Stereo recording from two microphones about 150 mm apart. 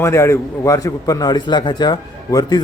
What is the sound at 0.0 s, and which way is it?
A man's voice, 20° left (ahead or behind).